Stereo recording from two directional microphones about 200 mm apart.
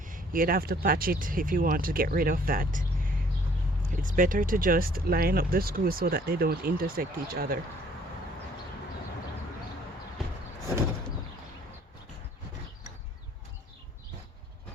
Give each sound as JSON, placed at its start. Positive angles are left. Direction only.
{"t": 0.0, "sound": "speech", "side_deg": -45}
{"t": 4.0, "sound": "speech", "side_deg": -40}